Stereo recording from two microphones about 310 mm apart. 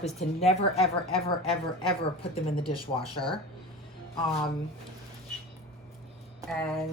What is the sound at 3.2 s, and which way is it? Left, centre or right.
Speech, centre.